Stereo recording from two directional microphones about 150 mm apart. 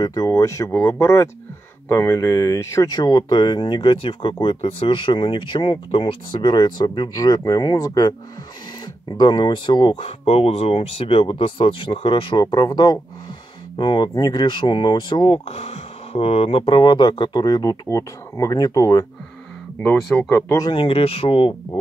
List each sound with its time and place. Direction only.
0.0 s speech: 25° left (ahead or behind)
9.2 s speech: 30° left (ahead or behind)
19.8 s speech: 5° left (ahead or behind)
20.2 s speech: 20° left (ahead or behind)
20.7 s speech: 40° left (ahead or behind)